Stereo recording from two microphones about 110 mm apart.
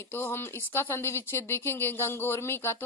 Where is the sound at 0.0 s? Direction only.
20° left (ahead or behind).